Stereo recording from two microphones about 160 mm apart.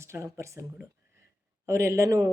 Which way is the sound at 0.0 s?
15° right (ahead or behind).